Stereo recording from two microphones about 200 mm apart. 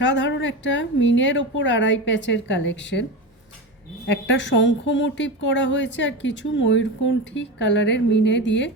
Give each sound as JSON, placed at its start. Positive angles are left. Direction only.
{"t": 0.0, "sound": "a woman's voice", "side_deg": 65}
{"t": 4.1, "sound": "a woman's voice", "side_deg": 65}